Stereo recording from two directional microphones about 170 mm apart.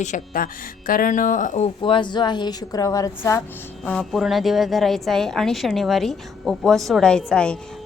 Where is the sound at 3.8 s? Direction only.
Centre (ahead or behind).